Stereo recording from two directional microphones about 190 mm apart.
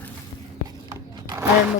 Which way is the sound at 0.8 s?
20° right (ahead or behind).